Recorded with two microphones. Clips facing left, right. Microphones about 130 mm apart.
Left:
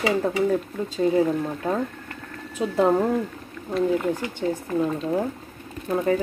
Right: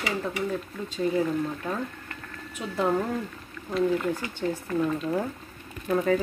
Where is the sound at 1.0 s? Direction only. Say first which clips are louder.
Left 4 dB; 30° left (ahead or behind).